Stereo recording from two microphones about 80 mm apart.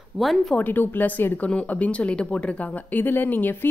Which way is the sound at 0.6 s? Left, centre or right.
Left.